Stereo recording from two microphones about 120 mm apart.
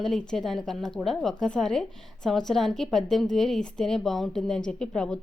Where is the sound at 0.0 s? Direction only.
5° left (ahead or behind).